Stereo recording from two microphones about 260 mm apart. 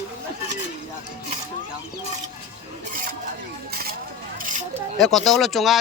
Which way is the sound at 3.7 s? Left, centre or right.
Right.